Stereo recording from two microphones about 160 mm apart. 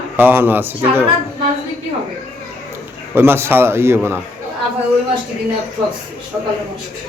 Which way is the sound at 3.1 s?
15° right (ahead or behind).